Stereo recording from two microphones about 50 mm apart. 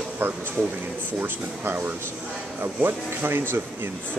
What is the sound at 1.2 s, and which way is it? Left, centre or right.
Speech, right.